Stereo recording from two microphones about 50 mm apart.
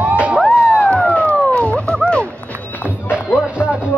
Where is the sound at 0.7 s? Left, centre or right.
Left.